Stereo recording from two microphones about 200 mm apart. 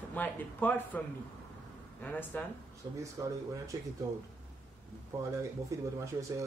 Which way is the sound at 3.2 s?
15° right (ahead or behind).